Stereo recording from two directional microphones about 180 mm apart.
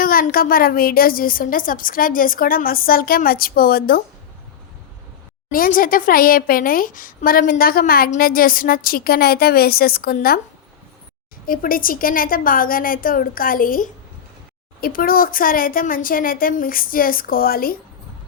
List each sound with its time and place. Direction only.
0.0 s a woman's voice: 55° left (ahead or behind)
5.5 s a woman's voice: 50° left (ahead or behind)
11.4 s a woman's voice: 50° left (ahead or behind)